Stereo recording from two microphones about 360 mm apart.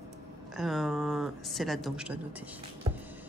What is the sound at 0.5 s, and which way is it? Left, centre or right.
Speech, centre.